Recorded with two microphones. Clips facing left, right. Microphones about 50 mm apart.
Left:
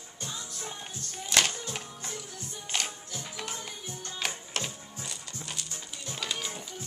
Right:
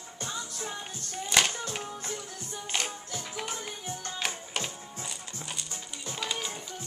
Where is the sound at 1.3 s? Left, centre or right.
Centre.